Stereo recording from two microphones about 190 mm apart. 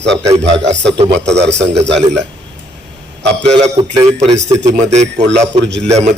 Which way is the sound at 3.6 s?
35° right (ahead or behind).